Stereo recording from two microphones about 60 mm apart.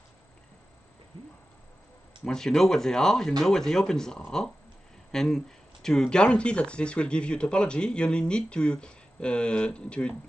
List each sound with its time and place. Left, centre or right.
2.2 s speech: centre